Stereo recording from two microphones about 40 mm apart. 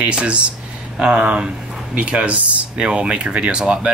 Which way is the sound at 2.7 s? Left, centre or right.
Right.